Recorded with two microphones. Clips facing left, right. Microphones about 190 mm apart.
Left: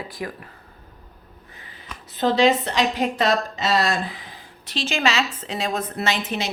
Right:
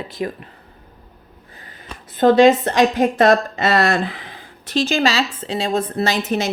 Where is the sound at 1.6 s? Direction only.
45° right (ahead or behind).